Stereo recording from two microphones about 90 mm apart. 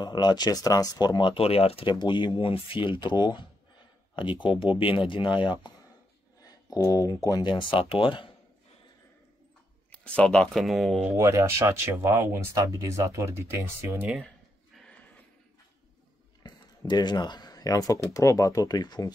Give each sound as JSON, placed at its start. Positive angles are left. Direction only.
{"t": 0.0, "sound": "speech", "side_deg": 50}
{"t": 1.3, "sound": "speech", "side_deg": 90}
{"t": 4.1, "sound": "speech", "side_deg": 65}
{"t": 6.4, "sound": "speech", "side_deg": 40}
{"t": 7.5, "sound": "speech", "side_deg": 85}
{"t": 9.8, "sound": "speech", "side_deg": 15}
{"t": 11.1, "sound": "speech", "side_deg": -30}
{"t": 16.4, "sound": "speech", "side_deg": 50}